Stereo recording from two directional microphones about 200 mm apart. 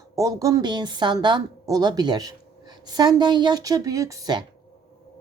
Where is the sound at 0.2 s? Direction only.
15° right (ahead or behind).